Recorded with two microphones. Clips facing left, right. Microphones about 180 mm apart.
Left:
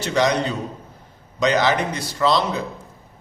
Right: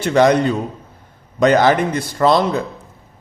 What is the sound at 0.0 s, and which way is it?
A man's voice, 55° right (ahead or behind).